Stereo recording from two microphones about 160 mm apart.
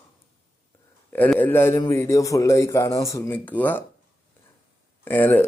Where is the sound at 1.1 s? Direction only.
10° left (ahead or behind).